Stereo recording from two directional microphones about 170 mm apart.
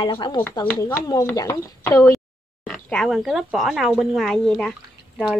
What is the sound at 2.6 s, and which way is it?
Speech, 5° left (ahead or behind).